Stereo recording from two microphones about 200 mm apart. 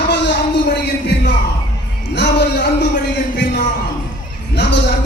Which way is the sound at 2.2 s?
55° left (ahead or behind).